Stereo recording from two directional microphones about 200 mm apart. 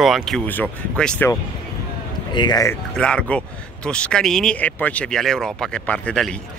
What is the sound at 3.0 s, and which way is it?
Speech, 5° left (ahead or behind).